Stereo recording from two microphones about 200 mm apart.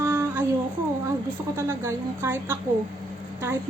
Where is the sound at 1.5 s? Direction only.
15° right (ahead or behind).